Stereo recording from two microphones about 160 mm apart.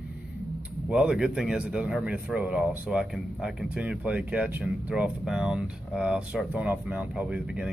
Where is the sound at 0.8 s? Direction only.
5° right (ahead or behind).